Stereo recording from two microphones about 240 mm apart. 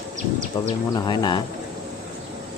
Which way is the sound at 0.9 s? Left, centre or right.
Centre.